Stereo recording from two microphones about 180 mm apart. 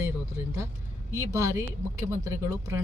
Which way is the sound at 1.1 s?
15° right (ahead or behind).